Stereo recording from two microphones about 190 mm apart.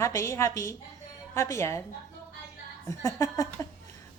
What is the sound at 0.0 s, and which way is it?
Speech, 15° left (ahead or behind).